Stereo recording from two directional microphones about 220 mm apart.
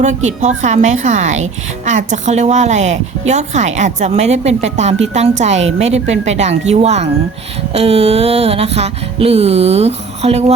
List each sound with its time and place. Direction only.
0.0 s a woman's voice: 35° right (ahead or behind)
5.8 s music: 30° right (ahead or behind)